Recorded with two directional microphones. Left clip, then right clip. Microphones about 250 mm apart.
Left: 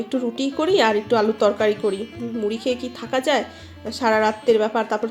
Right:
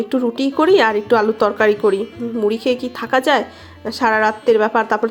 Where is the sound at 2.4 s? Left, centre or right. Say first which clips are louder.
Right 6 dB; centre.